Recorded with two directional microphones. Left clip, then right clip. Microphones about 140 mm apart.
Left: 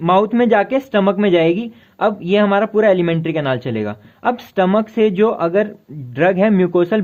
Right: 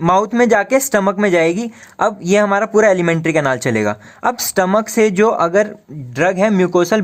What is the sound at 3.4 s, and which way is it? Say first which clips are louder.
Speech: right 4 dB; 45° right (ahead or behind).